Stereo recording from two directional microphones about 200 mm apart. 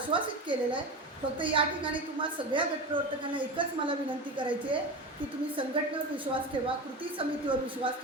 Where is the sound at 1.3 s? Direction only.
25° right (ahead or behind).